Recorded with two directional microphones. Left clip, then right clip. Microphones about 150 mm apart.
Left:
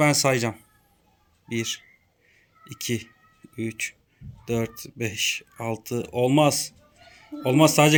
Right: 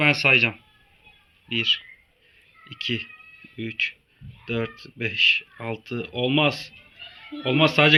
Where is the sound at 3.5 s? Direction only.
35° left (ahead or behind).